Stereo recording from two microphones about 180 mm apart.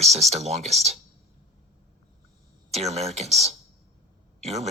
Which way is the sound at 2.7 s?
35° right (ahead or behind).